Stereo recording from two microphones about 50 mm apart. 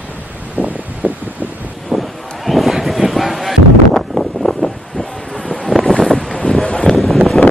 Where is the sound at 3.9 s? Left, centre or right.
Centre.